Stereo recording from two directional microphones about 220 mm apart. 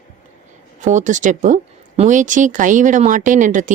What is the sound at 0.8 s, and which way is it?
Speech, 35° right (ahead or behind).